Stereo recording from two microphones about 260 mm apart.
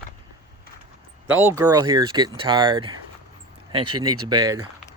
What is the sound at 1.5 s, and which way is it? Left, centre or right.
Speech, centre.